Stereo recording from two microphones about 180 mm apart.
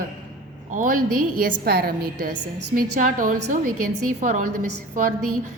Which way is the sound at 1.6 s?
60° right (ahead or behind).